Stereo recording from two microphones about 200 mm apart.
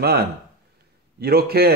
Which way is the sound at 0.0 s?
55° right (ahead or behind).